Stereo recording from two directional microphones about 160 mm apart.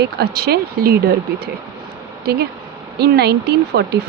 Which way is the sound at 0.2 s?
85° right.